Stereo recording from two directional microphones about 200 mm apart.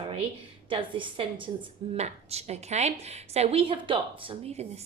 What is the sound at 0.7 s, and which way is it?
A woman's voice, 25° right (ahead or behind).